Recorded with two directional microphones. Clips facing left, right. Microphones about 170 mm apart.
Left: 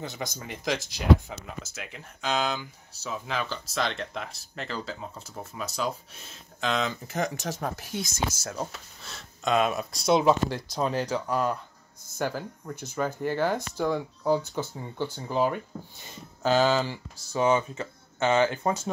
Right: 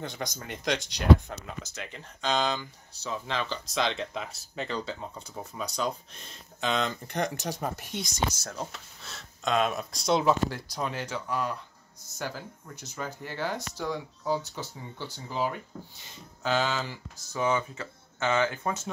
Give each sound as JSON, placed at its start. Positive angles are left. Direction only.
{"t": 0.0, "sound": "speech", "side_deg": 5}
{"t": 10.1, "sound": "speech", "side_deg": 20}
{"t": 10.8, "sound": "speech", "side_deg": 35}
{"t": 12.2, "sound": "speech", "side_deg": 55}
{"t": 16.4, "sound": "speech", "side_deg": 35}